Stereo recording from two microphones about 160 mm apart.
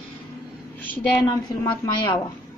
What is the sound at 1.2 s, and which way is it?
Speech, 30° left (ahead or behind).